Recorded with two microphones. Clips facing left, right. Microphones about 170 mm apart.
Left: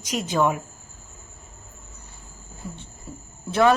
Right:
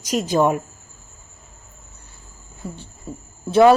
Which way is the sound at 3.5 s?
30° right (ahead or behind).